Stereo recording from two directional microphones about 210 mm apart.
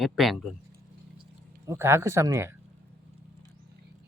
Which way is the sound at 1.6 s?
10° right (ahead or behind).